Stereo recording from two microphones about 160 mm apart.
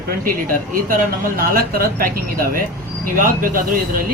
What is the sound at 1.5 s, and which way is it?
Speech, 65° right (ahead or behind).